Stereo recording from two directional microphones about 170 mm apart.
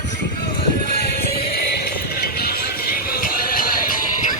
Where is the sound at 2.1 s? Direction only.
65° left (ahead or behind).